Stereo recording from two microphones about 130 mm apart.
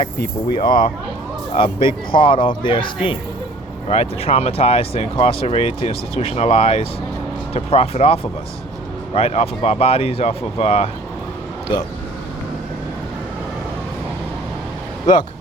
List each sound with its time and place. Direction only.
0.5 s speech: 40° left (ahead or behind); by 10.8 s 55° left (ahead or behind)